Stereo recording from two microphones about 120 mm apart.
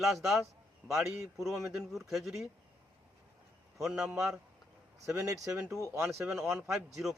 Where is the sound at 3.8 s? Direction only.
5° right (ahead or behind).